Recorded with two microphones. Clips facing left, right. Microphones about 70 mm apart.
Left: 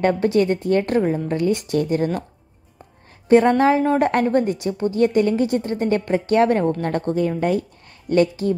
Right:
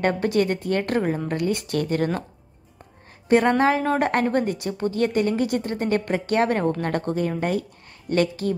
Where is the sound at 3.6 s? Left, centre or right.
Right.